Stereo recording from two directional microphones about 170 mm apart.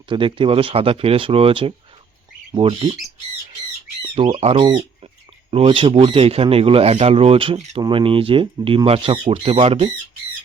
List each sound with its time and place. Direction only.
0.1 s speech: 30° right (ahead or behind)
4.1 s speech: 30° right (ahead or behind)